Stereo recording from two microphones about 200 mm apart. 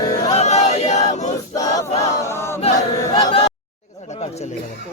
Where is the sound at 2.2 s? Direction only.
10° left (ahead or behind).